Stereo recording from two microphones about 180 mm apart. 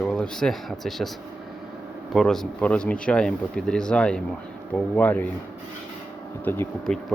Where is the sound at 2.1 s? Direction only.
Centre (ahead or behind).